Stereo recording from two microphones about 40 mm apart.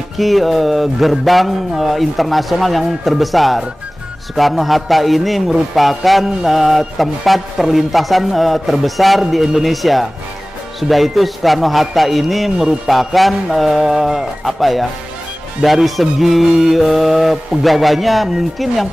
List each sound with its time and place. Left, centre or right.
0.2 s music: centre